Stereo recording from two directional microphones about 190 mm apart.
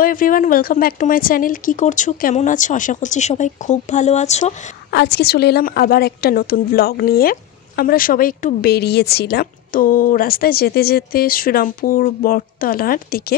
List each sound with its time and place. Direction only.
0.0 s a woman's voice: 45° left (ahead or behind)
4.9 s a woman's voice: 60° left (ahead or behind)